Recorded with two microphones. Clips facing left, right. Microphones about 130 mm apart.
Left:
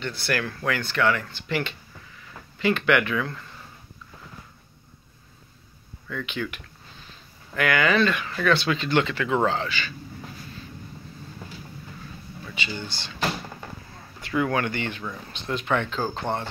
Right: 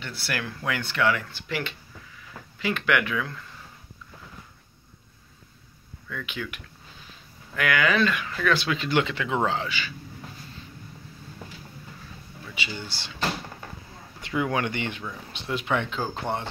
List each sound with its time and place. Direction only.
0.0 s speech: 10° right (ahead or behind)
6.0 s speech: centre (ahead or behind)
12.5 s speech: 10° right (ahead or behind)
14.2 s speech: 15° right (ahead or behind)